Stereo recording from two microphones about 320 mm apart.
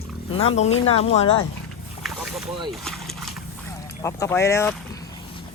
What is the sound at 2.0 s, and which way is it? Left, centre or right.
Boat, centre.